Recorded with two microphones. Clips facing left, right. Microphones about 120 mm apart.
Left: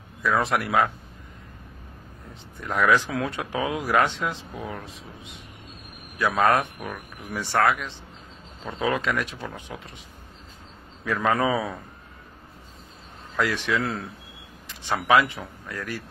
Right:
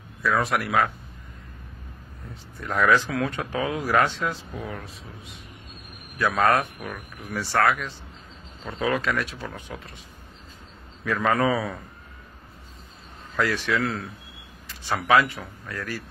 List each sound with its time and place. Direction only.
0.2 s speech: 25° left (ahead or behind)
2.6 s speech: 10° left (ahead or behind)
6.1 s speech: 10° left (ahead or behind)
11.1 s speech: 10° left (ahead or behind)
13.4 s speech: 15° left (ahead or behind)
15.0 s speech: 15° left (ahead or behind)